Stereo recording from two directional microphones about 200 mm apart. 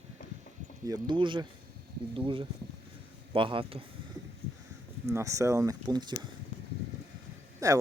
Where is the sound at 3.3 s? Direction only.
25° right (ahead or behind).